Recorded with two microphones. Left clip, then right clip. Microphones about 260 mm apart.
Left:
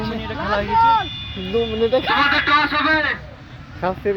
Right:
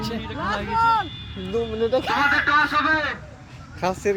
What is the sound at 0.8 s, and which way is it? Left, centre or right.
Speech, right.